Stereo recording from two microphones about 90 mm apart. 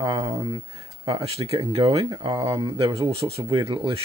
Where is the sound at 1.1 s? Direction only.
90° right.